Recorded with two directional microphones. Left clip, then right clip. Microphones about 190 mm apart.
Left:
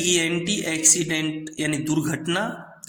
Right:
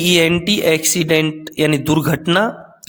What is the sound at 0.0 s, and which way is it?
Speech, 50° right (ahead or behind).